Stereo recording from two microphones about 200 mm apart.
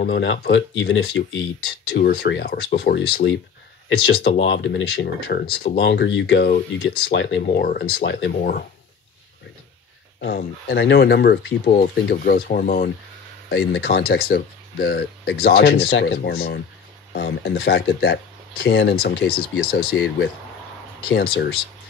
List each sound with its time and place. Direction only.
0.0 s speech: 60° left (ahead or behind)
8.4 s speech: 45° left (ahead or behind)
10.2 s speech: 50° left (ahead or behind)